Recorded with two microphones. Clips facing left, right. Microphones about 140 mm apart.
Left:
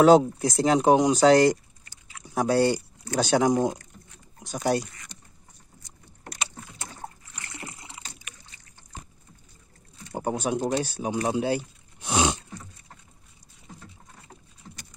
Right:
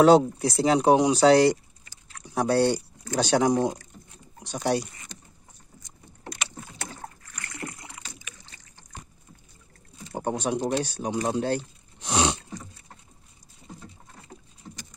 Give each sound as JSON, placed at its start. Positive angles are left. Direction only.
{"t": 0.0, "sound": "speech", "side_deg": 0}
{"t": 2.0, "sound": "a sound", "side_deg": 5}
{"t": 3.2, "sound": "speech", "side_deg": 0}
{"t": 7.2, "sound": "rowboat", "side_deg": 25}
{"t": 10.1, "sound": "speech", "side_deg": 0}